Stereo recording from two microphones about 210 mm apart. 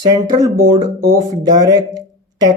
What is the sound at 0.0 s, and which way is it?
Speech, 20° right (ahead or behind).